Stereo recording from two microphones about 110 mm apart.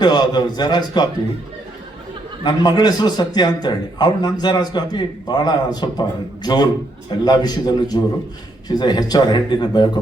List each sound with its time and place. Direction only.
0.0 s a man's voice: 40° left (ahead or behind)
2.4 s a man's voice: 40° left (ahead or behind)